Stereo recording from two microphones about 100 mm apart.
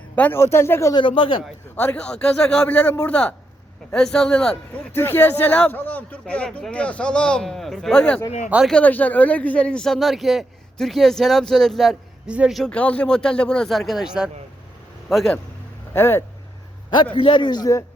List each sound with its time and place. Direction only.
0.3 s speech: 25° left (ahead or behind)
0.9 s speech: 55° left (ahead or behind)
1.7 s speech: 15° left (ahead or behind)
4.9 s speech: 20° left (ahead or behind); by 12.3 s centre (ahead or behind)
12.3 s speech: 10° right (ahead or behind)
12.7 s speech: 15° left (ahead or behind)
15.9 s speech: 25° left (ahead or behind)
16.9 s a man's voice: 60° left (ahead or behind)